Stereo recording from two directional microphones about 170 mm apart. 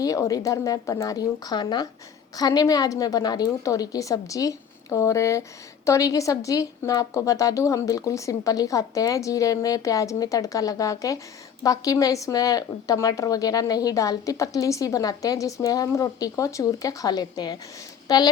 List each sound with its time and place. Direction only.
0.0 s a woman's voice: 20° left (ahead or behind)